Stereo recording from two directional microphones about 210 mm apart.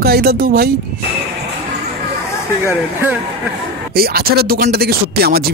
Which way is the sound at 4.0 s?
45° right (ahead or behind).